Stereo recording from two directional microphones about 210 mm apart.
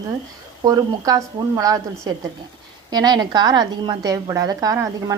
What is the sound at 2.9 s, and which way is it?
A woman's voice, 20° right (ahead or behind).